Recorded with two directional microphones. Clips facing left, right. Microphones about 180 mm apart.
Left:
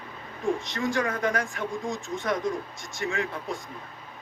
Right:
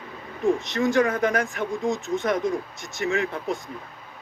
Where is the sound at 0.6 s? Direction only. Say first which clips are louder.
Right 6 dB; 25° right (ahead or behind).